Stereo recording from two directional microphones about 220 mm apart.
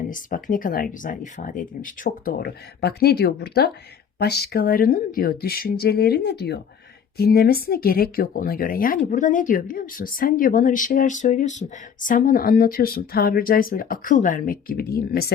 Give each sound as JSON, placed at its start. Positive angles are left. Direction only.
{"t": 0.1, "sound": "speech", "side_deg": 40}